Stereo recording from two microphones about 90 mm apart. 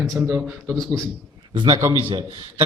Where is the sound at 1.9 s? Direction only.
75° right (ahead or behind).